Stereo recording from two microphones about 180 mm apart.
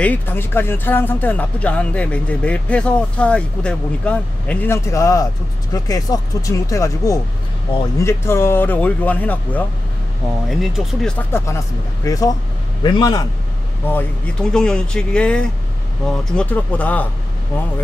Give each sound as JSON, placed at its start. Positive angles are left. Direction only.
{"t": 0.0, "sound": "a man's voice", "side_deg": 10}
{"t": 13.9, "sound": "speech", "side_deg": 5}